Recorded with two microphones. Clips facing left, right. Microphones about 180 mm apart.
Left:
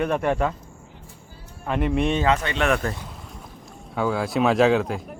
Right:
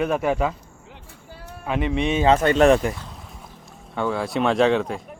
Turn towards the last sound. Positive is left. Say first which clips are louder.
# even
turn(degrees=0)  # may be behind; listen again after turning